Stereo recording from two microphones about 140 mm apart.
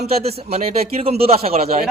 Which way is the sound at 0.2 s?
45° right (ahead or behind).